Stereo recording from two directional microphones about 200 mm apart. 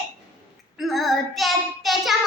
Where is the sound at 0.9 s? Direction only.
Centre (ahead or behind).